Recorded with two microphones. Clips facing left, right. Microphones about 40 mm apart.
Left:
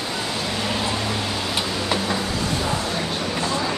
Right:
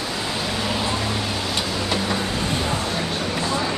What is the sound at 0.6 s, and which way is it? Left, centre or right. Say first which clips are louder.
Vehicle: even; centre.